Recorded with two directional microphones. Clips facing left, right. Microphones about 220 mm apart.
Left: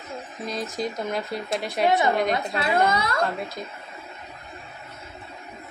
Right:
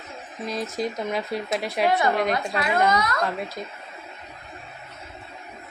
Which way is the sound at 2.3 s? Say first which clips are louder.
Even; 30° left (ahead or behind).